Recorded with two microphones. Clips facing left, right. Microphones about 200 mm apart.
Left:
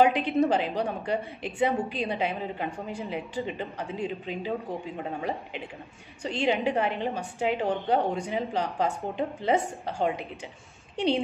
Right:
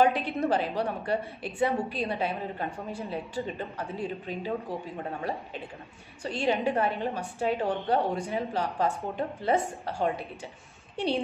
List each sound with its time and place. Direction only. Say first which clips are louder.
0.0 s a woman's voice: left 3 dB; 15° left (ahead or behind)
6.2 s a woman's voice: left 1 dB; 15° left (ahead or behind)